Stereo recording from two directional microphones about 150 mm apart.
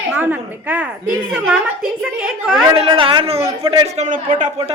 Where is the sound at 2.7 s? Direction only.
35° right (ahead or behind); by 4.5 s 60° right (ahead or behind).